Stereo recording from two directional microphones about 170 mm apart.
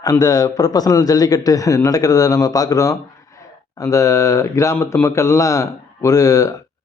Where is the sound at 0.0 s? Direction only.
20° left (ahead or behind).